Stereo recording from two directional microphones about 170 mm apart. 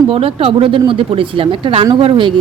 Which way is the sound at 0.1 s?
35° right (ahead or behind).